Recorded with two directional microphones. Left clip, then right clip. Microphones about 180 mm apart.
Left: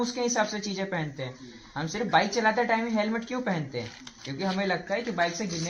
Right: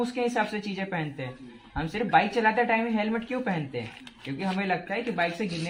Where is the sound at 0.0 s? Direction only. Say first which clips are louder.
Even; 35° right (ahead or behind).